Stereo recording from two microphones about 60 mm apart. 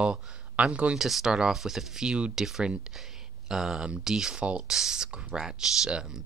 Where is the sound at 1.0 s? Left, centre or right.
Centre.